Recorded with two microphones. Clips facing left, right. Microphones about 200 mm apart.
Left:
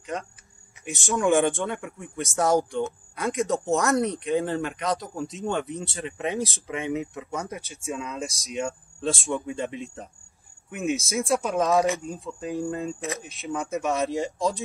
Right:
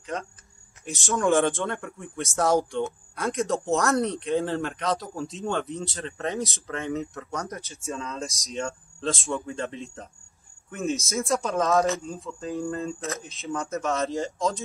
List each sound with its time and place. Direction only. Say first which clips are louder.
0.0 s speech: even; centre (ahead or behind)
7.7 s speech: left 2 dB; 15° left (ahead or behind)